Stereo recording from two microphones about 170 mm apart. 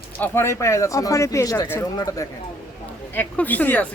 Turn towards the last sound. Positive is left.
turn(degrees=10)  # may be behind; listen again after turning